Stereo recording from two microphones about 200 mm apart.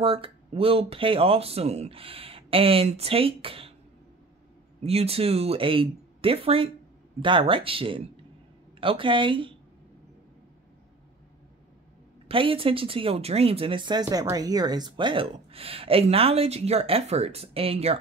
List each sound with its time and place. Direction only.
0.0 s speech: 25° right (ahead or behind)
4.8 s speech: 30° right (ahead or behind)
12.3 s speech: 25° right (ahead or behind)